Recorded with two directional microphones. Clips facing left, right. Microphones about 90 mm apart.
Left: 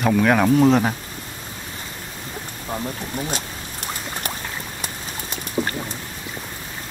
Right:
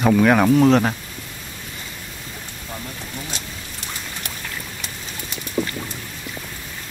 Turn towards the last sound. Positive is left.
turn(degrees=15)  # may be behind; listen again after turning